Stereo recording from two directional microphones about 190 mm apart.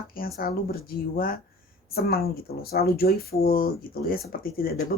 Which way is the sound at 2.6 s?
55° left (ahead or behind).